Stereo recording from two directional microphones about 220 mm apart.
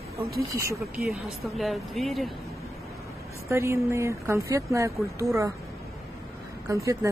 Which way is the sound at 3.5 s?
10° right (ahead or behind).